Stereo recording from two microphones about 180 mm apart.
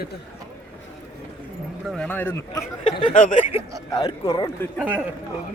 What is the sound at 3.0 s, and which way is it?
Speech, 45° left (ahead or behind).